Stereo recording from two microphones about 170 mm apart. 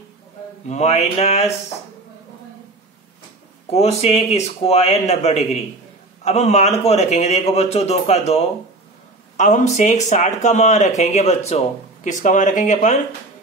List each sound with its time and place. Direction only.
0.7 s a man's voice: 40° left (ahead or behind)
3.7 s a man's voice: 40° left (ahead or behind)